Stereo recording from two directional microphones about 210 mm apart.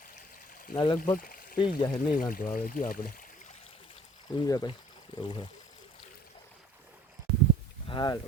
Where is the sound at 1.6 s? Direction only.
20° left (ahead or behind).